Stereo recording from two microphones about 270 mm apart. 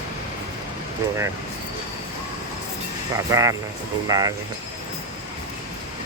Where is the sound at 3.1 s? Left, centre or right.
Centre.